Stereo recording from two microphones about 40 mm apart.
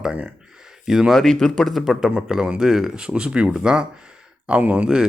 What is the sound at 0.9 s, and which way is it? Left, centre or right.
Speech, centre.